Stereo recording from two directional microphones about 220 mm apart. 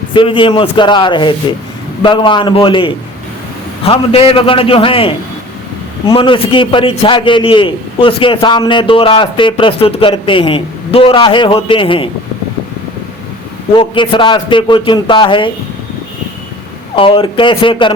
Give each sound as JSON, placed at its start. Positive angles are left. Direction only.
{"t": 0.1, "sound": "a man's voice", "side_deg": 20}
{"t": 13.7, "sound": "a man's voice", "side_deg": 20}
{"t": 16.9, "sound": "a man's voice", "side_deg": 25}